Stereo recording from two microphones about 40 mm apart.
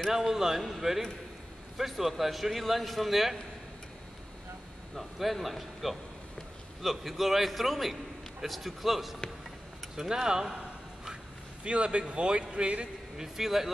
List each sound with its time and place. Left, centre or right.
0.1 s a man's voice: centre
4.9 s a man's voice: centre
9.9 s a man's voice: centre
11.6 s speech: right
13.2 s a man's voice: centre